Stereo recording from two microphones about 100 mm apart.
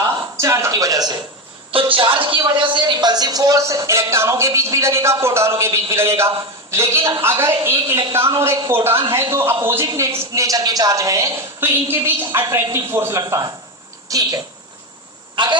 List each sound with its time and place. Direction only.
0.4 s speech: 30° right (ahead or behind)
1.7 s a woman's voice: 65° right (ahead or behind); by 13.2 s 25° right (ahead or behind)
14.1 s a woman's voice: 40° right (ahead or behind)
15.4 s a man's voice: 50° right (ahead or behind)